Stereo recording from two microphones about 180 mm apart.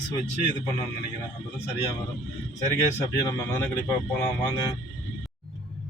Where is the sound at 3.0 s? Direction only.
20° left (ahead or behind).